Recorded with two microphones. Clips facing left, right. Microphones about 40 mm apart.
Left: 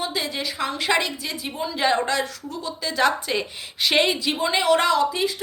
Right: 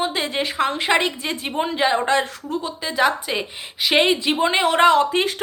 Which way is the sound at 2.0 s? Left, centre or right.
Right.